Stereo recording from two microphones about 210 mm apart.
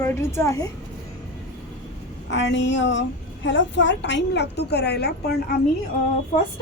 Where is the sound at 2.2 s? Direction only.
60° left (ahead or behind).